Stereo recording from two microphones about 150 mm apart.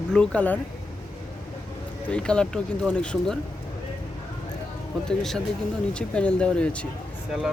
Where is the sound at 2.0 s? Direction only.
5° left (ahead or behind).